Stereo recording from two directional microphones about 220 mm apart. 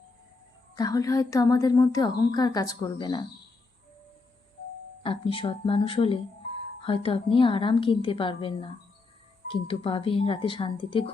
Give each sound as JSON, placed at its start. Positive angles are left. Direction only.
{"t": 0.8, "sound": "speech", "side_deg": 15}
{"t": 5.0, "sound": "a woman's voice", "side_deg": 25}